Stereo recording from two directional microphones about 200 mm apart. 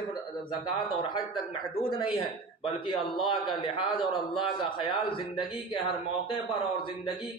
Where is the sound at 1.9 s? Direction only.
25° left (ahead or behind).